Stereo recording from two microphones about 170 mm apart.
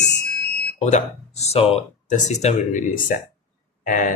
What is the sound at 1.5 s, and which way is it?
Speech, 40° left (ahead or behind).